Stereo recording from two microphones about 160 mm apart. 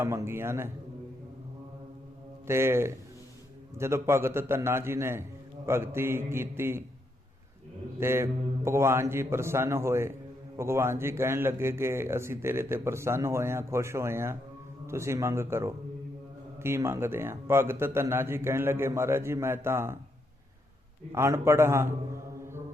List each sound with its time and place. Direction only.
0.0 s speech: 15° right (ahead or behind)
2.5 s speech: 15° right (ahead or behind)
7.9 s speech: 15° right (ahead or behind)
21.1 s speech: 15° right (ahead or behind)